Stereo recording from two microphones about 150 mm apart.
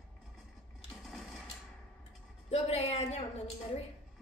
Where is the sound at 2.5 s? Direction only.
45° left (ahead or behind).